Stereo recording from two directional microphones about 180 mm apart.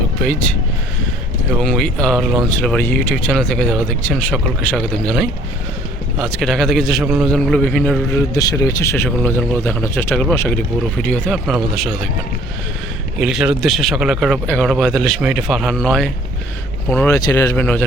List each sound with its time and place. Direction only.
0.2 s speech: 5° left (ahead or behind)
1.5 s speech: 5° left (ahead or behind)
8.3 s speech: 20° left (ahead or behind); by 11.9 s centre (ahead or behind)
13.1 s speech: 5° right (ahead or behind)